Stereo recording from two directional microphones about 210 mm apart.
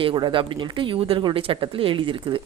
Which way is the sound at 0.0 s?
25° right (ahead or behind).